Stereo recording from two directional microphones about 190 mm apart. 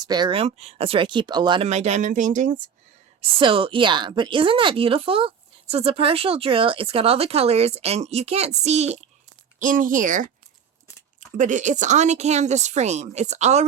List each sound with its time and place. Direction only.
0.1 s speech: 25° right (ahead or behind)
1.6 s a woman's voice: 35° right (ahead or behind)
3.2 s speech: 25° right (ahead or behind); by 10.2 s 45° right (ahead or behind)
11.3 s a woman's voice: 40° right (ahead or behind)